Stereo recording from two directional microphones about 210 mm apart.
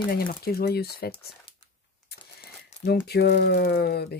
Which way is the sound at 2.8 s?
50° left (ahead or behind).